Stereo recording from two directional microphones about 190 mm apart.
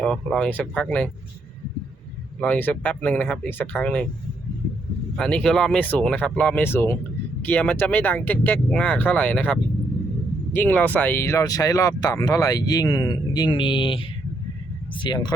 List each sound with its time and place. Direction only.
0.0 s speech: 5° left (ahead or behind)
2.4 s speech: 10° left (ahead or behind)
5.1 s speech: 5° left (ahead or behind); by 15.3 s 20° left (ahead or behind)